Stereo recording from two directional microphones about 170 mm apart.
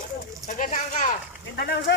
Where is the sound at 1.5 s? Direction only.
65° left (ahead or behind).